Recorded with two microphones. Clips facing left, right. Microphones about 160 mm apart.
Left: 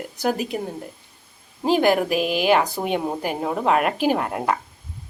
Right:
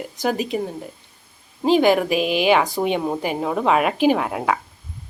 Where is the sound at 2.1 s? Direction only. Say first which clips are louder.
Right 2 dB; 45° left (ahead or behind).